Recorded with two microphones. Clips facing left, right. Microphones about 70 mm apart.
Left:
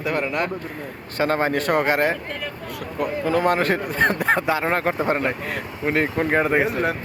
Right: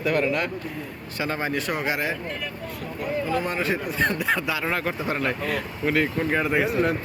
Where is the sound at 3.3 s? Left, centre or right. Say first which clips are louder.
Left 8 dB; left.